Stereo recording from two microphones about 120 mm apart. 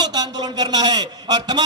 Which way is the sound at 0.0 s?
35° right (ahead or behind).